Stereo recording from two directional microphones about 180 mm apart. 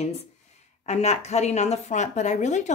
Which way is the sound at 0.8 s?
40° left (ahead or behind).